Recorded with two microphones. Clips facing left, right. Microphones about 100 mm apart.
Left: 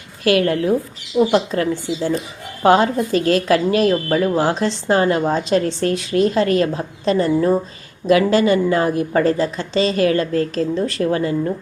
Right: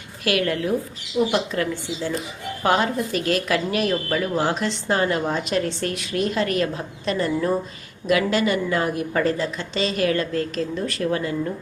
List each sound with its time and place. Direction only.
0.3 s a woman's voice: 35° left (ahead or behind)